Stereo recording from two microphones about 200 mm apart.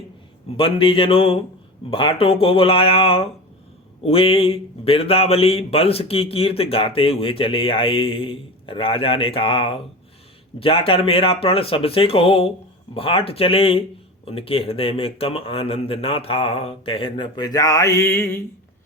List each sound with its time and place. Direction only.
0.5 s speech: 25° left (ahead or behind)